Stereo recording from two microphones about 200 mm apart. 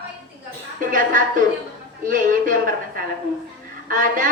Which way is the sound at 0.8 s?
40° right (ahead or behind).